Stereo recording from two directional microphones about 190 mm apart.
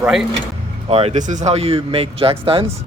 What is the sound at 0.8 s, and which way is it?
Speech, 30° right (ahead or behind).